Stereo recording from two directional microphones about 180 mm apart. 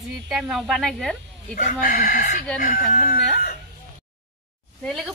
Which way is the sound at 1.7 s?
50° left (ahead or behind).